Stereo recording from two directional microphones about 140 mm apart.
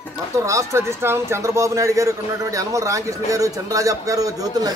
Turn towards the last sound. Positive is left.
turn(degrees=-25)  # may be behind; listen again after turning